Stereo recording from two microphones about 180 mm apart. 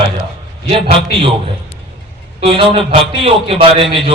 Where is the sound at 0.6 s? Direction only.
30° right (ahead or behind).